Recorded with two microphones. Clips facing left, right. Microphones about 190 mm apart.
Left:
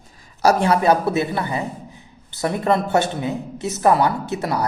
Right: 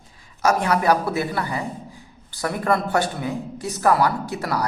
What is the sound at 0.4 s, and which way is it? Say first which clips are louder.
Speech: left 3 dB; 30° left (ahead or behind).